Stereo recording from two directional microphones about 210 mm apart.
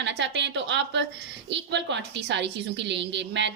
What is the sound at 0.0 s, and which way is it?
A woman's voice, 55° right (ahead or behind).